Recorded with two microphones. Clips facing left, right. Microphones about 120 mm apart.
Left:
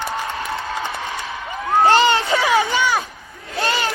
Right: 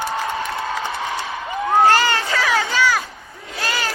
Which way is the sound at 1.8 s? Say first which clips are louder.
Left 2 dB; 20° left (ahead or behind).